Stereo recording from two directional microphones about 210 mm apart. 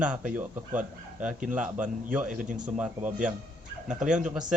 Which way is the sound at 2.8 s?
5° right (ahead or behind).